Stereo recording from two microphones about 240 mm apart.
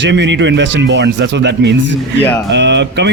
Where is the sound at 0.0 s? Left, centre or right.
Right.